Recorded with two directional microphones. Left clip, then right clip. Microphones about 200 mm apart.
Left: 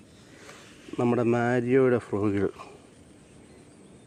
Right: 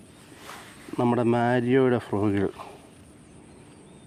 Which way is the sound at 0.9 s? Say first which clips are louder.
Right 1 dB; 15° right (ahead or behind).